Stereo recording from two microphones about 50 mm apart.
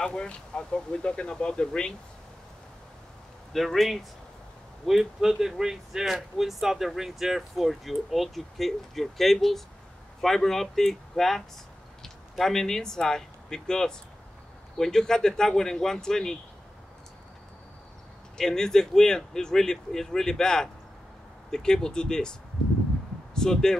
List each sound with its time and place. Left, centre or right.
0.0 s speech: centre
3.5 s speech: centre
18.4 s speech: centre
23.3 s speech: centre